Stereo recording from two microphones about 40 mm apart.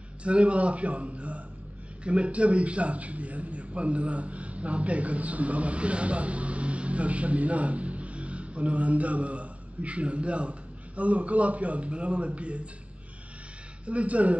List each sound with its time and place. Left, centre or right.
0.2 s a man's voice: right
13.8 s a man's voice: right